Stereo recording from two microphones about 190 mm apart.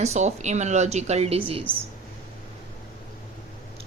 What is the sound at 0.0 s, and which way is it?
A woman's voice, 35° right (ahead or behind).